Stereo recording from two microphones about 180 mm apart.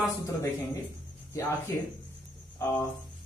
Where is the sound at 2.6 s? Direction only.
15° left (ahead or behind).